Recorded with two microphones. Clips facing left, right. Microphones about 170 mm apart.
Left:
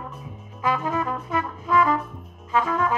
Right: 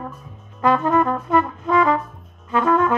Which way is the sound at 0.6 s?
55° right (ahead or behind).